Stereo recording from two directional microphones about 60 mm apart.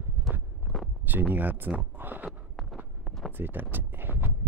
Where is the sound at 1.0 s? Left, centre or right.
Right.